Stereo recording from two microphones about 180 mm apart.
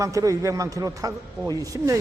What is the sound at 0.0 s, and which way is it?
A man's voice, 20° right (ahead or behind).